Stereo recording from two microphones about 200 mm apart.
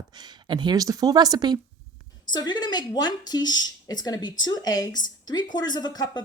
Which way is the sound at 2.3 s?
20° left (ahead or behind).